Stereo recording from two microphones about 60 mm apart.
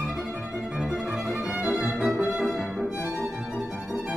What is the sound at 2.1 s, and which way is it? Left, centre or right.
Music, centre.